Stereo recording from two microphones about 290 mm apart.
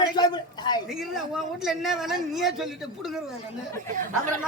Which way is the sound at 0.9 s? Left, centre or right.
Centre.